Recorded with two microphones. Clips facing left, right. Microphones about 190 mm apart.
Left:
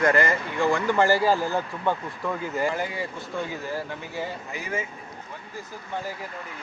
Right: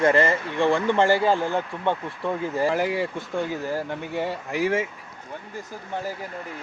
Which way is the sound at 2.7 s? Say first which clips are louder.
Right 6 dB; 75° right (ahead or behind).